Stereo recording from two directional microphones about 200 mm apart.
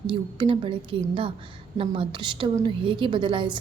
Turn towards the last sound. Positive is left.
turn(degrees=-25)  # may be behind; listen again after turning